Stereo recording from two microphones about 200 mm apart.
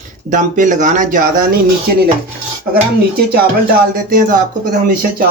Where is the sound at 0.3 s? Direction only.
40° right (ahead or behind).